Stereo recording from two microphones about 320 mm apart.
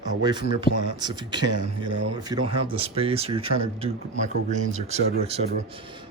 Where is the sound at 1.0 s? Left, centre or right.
Centre.